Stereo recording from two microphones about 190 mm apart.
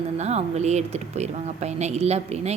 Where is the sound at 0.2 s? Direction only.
35° right (ahead or behind).